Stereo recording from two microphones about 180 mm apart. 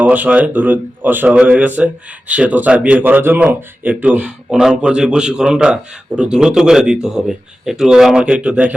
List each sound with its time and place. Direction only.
0.0 s speech: 10° right (ahead or behind)